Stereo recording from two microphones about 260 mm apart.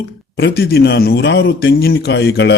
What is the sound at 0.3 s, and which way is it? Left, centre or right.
Speech, left.